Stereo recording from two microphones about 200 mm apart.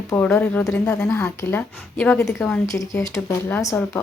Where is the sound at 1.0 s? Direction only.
15° left (ahead or behind).